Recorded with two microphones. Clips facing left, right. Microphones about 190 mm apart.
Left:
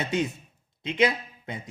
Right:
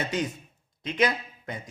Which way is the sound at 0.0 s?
25° left (ahead or behind).